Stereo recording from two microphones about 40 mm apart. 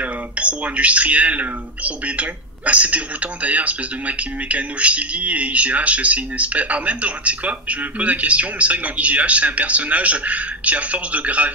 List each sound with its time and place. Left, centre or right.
0.0 s speech: right